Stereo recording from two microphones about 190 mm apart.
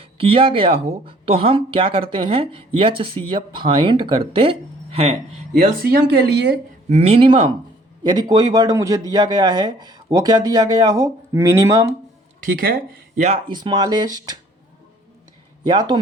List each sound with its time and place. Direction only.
0.0 s a man's voice: 30° right (ahead or behind)
5.8 s speech: 55° right (ahead or behind)
6.8 s a man's voice: 35° right (ahead or behind); by 11.9 s 15° right (ahead or behind)
12.4 s speech: 45° right (ahead or behind)
13.2 s a man's voice: 25° right (ahead or behind)
15.6 s a man's voice: 20° right (ahead or behind)